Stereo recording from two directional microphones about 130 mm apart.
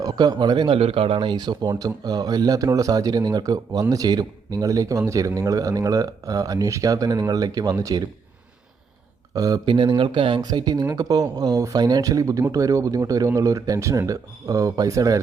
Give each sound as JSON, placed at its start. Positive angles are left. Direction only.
{"t": 0.0, "sound": "speech", "side_deg": -30}
{"t": 9.3, "sound": "speech", "side_deg": -30}